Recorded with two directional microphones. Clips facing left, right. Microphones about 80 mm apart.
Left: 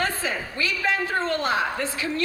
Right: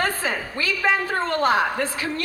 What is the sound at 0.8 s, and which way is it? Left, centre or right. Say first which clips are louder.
A woman's voice: right 2 dB; right.